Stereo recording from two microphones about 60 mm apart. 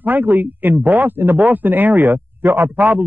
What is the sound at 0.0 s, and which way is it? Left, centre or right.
Speech, right.